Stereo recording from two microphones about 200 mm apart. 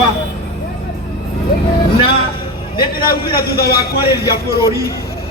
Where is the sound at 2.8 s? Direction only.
50° left (ahead or behind).